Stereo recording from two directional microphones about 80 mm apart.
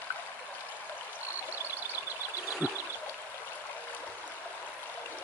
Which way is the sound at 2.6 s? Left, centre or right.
Right.